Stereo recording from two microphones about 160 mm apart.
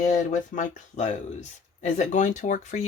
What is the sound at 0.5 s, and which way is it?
Speech, 55° left (ahead or behind).